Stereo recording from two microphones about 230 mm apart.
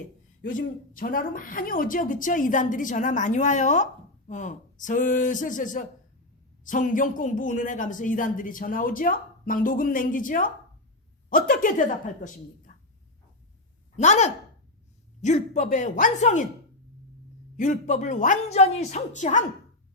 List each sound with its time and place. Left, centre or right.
0.4 s a woman's voice: left
13.9 s a woman's voice: left
17.6 s a woman's voice: left